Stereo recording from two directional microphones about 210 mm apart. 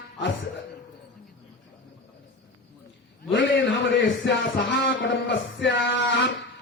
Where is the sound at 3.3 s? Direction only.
65° left (ahead or behind).